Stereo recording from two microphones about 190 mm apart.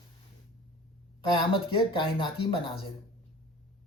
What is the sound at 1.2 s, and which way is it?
Speech, 25° left (ahead or behind).